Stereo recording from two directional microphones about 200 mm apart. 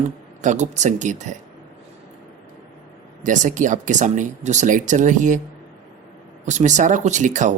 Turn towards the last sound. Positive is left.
turn(degrees=-40)  # may be behind; listen again after turning